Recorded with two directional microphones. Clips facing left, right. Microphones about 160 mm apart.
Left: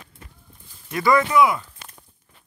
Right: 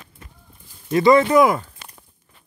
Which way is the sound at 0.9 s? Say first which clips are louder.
Right 5 dB; 25° right (ahead or behind).